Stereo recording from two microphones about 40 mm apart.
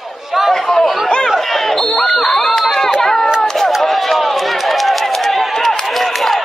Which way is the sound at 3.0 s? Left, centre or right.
Centre.